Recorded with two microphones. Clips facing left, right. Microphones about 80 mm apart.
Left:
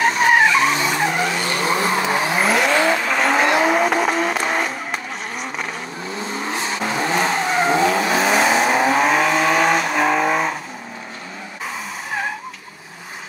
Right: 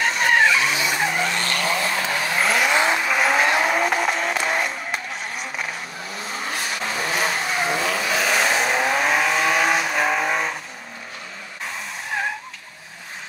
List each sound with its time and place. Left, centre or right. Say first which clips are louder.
0.0 s vehicle: left 3 dB; centre
1.5 s vehicle: left 4 dB; left
2.4 s vehicle: left 2 dB; centre
2.7 s vehicle: left 3 dB; centre
3.0 s vehicle: left 2 dB; centre
6.5 s vehicle: left 4 dB; left
8.3 s vehicle: left 4 dB; centre
11.6 s vehicle: left 2 dB; centre